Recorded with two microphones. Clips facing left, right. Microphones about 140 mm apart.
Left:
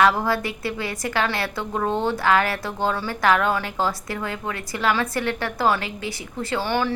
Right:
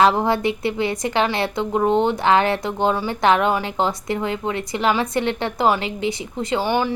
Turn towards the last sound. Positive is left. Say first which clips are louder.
# right 3 dB
turn(degrees=-15)  # may be behind; listen again after turning